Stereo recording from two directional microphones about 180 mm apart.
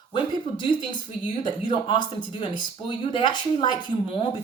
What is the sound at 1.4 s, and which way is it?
A woman's voice, 25° left (ahead or behind).